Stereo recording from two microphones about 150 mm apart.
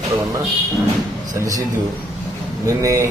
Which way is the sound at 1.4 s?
25° right (ahead or behind).